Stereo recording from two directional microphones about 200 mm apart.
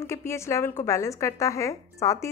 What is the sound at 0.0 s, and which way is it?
A woman's voice, 15° left (ahead or behind).